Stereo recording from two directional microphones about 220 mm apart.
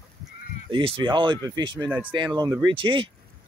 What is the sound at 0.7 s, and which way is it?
Speech, 25° right (ahead or behind).